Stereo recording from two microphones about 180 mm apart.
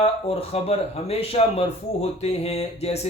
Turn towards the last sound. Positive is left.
turn(degrees=35)  # may be behind; listen again after turning